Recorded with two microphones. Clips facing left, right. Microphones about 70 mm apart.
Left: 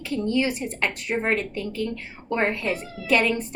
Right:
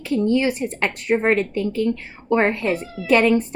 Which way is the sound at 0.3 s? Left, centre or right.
Right.